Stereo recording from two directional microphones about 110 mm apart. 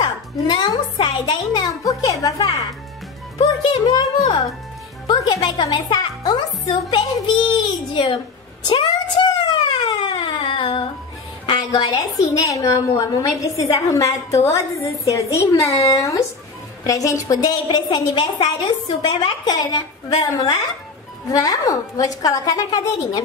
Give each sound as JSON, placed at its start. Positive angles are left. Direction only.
{"t": 0.0, "sound": "a child's voice", "side_deg": 40}
{"t": 8.6, "sound": "a sound", "side_deg": 45}
{"t": 11.4, "sound": "a woman's voice", "side_deg": 40}
{"t": 12.3, "sound": "a woman's voice", "side_deg": 30}
{"t": 18.1, "sound": "a woman's voice", "side_deg": 55}
{"t": 19.2, "sound": "a child's voice", "side_deg": 40}